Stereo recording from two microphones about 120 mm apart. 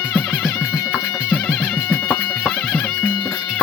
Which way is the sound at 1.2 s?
15° left (ahead or behind).